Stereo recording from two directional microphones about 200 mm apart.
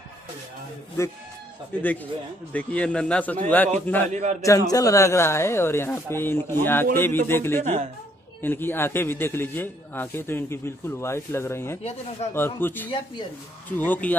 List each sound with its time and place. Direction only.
2.5 s a man's voice: 5° left (ahead or behind)
4.1 s a man's voice: 35° right (ahead or behind)
4.4 s a man's voice: 15° left (ahead or behind)
11.8 s speech: 30° left (ahead or behind)
12.4 s a man's voice: 10° left (ahead or behind)
12.9 s speech: 25° left (ahead or behind)
13.7 s a man's voice: 10° left (ahead or behind)